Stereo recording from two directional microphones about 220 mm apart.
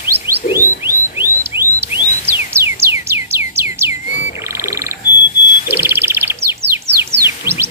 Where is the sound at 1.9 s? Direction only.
30° left (ahead or behind).